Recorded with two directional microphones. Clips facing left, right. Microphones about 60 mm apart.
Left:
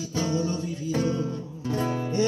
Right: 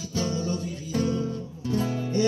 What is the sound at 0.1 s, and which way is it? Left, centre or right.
Music, left.